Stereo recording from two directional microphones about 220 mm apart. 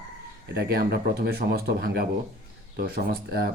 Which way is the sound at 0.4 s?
45° right (ahead or behind).